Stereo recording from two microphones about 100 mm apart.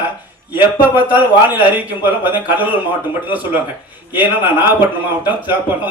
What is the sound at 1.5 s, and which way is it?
A man's voice, 15° right (ahead or behind).